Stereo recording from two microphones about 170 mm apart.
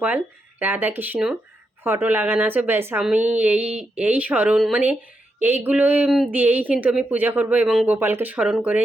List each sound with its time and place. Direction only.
0.6 s a woman's voice: 10° right (ahead or behind)